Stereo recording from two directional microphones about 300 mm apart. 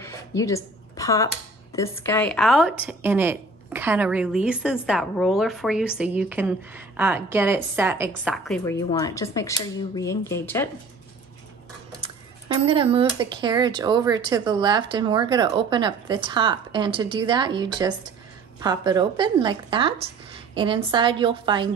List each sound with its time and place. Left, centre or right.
0.0 s a sound: centre
1.8 s a woman's voice: centre
8.6 s speech: centre
12.6 s speech: centre